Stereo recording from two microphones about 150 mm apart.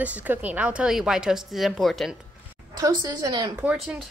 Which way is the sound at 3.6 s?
5° right (ahead or behind).